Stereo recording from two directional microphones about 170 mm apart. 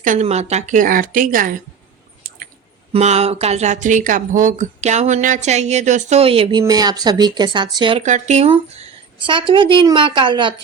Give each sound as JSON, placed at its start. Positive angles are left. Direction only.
{"t": 0.0, "sound": "a woman's voice", "side_deg": -45}
{"t": 2.9, "sound": "speech", "side_deg": -40}
{"t": 8.0, "sound": "speech", "side_deg": -45}